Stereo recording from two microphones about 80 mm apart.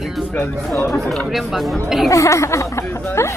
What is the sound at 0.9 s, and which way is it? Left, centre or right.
Speech, centre.